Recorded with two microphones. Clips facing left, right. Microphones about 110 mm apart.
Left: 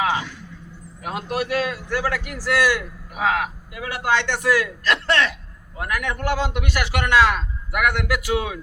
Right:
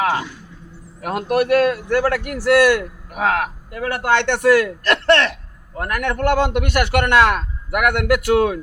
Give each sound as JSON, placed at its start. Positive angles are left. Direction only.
{"t": 0.0, "sound": "vehicle", "side_deg": -45}
{"t": 1.0, "sound": "a man's voice", "side_deg": -60}